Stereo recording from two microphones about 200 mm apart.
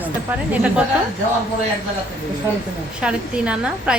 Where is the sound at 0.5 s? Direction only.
5° right (ahead or behind).